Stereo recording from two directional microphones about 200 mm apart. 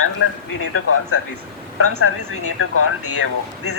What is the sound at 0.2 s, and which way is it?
Speech, 75° left (ahead or behind).